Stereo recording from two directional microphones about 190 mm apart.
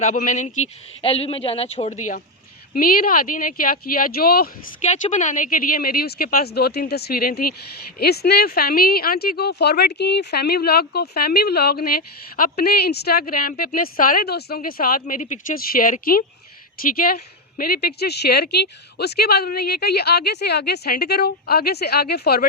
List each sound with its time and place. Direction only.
0.0 s speech: 40° left (ahead or behind)
4.8 s speech: 40° left (ahead or behind)
17.6 s a woman's voice: 55° left (ahead or behind)